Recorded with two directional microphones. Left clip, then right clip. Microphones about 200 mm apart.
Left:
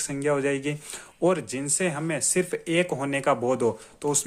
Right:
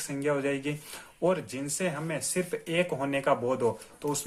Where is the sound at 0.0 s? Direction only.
30° left (ahead or behind).